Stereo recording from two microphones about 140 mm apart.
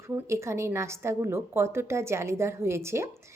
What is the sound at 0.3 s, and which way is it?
Speech, 20° right (ahead or behind).